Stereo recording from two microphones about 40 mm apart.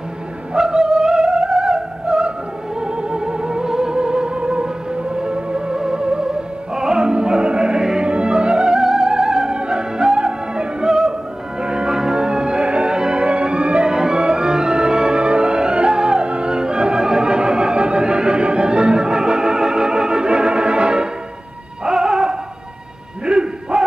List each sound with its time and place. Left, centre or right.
0.7 s music: centre
2.8 s music: right
8.5 s music: centre
9.5 s music: right
13.7 s music: centre
21.8 s music: centre
23.2 s a sound: right